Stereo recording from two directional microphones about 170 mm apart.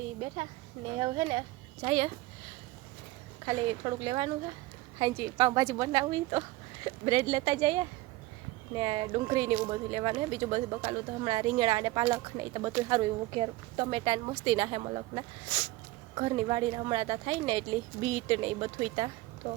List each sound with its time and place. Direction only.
0.9 s a woman's voice: 35° right (ahead or behind)
3.4 s a woman's voice: 35° right (ahead or behind)